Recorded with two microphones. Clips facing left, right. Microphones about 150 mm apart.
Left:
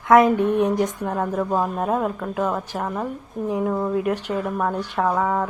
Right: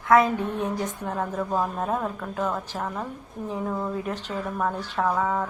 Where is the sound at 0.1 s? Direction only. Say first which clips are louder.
Left 5 dB; 20° left (ahead or behind).